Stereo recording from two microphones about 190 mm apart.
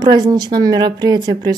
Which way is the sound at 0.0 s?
20° right (ahead or behind).